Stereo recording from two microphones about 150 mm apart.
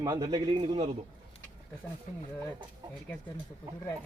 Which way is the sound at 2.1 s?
55° left (ahead or behind).